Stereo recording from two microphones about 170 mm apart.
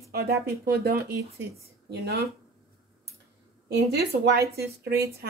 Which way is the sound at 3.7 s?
75° right (ahead or behind).